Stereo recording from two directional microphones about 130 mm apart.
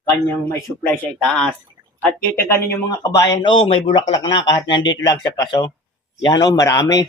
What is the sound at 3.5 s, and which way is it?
A man's voice, 45° left (ahead or behind).